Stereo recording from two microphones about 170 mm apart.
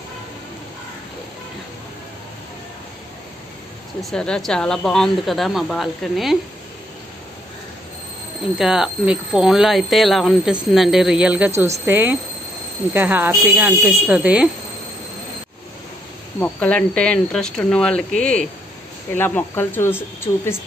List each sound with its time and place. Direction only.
4.0 s speech: 5° left (ahead or behind)
8.5 s speech: 5° right (ahead or behind)
16.3 s speech: 10° left (ahead or behind)